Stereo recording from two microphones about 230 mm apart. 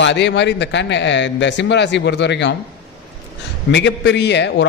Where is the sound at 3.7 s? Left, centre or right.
Left.